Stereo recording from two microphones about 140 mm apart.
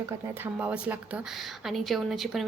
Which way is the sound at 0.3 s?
15° right (ahead or behind).